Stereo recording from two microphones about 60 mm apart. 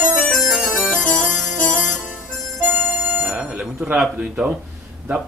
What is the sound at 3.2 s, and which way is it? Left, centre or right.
Alarm clock, centre.